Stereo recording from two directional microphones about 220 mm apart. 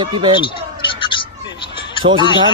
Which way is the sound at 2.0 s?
20° right (ahead or behind).